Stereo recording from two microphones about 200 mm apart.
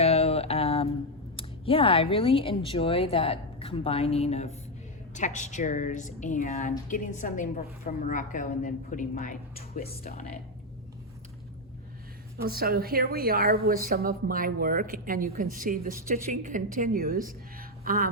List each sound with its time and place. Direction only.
0.0 s mantra: 30° left (ahead or behind)
1.4 s speech: 25° left (ahead or behind); by 10.2 s 45° left (ahead or behind)
12.4 s a woman's voice: 50° right (ahead or behind)